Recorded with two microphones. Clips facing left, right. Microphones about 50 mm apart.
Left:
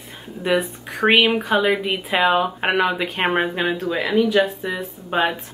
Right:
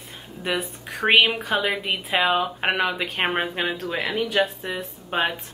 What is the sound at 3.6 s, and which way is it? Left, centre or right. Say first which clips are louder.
Speech: left 5 dB; left.